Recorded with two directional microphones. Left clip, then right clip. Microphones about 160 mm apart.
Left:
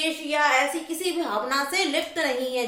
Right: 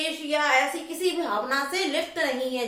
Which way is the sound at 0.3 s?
30° left (ahead or behind).